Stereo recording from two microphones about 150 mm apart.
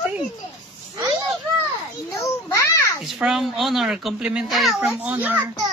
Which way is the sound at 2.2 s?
15° left (ahead or behind).